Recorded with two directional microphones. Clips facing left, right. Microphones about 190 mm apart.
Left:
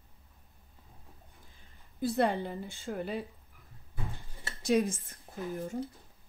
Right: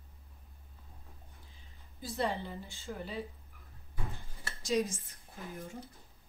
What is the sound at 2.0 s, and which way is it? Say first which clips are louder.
A woman's voice: left 6 dB; 55° left (ahead or behind).